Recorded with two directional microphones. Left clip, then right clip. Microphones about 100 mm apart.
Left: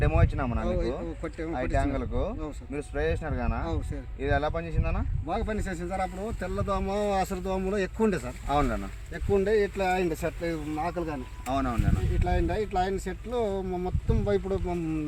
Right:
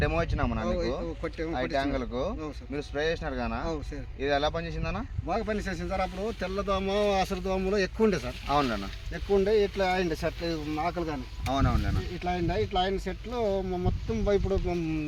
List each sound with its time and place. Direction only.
0.0 s speech: centre (ahead or behind)
5.3 s speech: 20° right (ahead or behind)
8.4 s speech: 10° left (ahead or behind)
9.4 s speech: 5° right (ahead or behind)
12.2 s speech: 15° right (ahead or behind)